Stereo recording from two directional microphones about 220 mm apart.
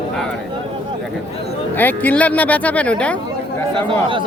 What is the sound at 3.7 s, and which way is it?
Speech, 20° right (ahead or behind).